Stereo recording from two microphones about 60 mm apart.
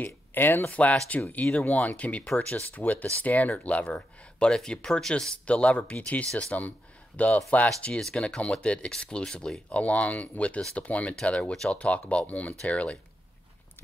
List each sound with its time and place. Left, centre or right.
0.0 s speech: left
0.7 s speech: left
11.3 s speech: centre